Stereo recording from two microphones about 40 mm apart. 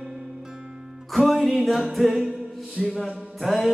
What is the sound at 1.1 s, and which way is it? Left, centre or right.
Music, centre.